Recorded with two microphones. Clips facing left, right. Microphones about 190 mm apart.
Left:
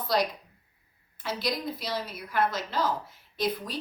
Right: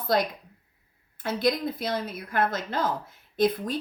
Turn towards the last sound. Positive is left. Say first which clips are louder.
# right 6 dB
turn(degrees=-50)  # may be behind; listen again after turning